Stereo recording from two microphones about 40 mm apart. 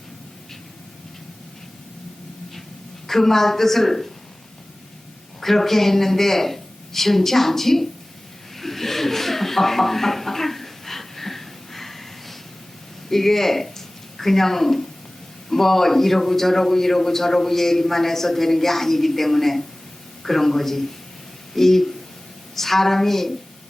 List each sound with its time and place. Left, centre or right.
3.1 s a man's voice: centre
5.4 s a man's voice: centre
8.5 s a sound: centre
13.1 s a man's voice: centre